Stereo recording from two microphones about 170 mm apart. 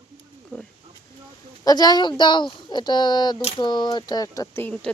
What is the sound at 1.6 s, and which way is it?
Speech, 25° left (ahead or behind).